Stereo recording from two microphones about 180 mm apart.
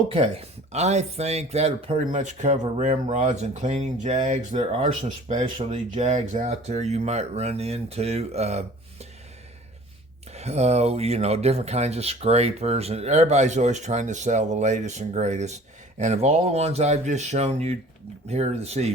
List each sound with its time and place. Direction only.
0.7 s speech: 40° right (ahead or behind)
10.3 s speech: 35° right (ahead or behind)